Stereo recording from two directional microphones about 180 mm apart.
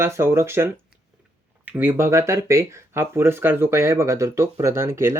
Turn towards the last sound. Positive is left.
turn(degrees=-15)  # may be behind; listen again after turning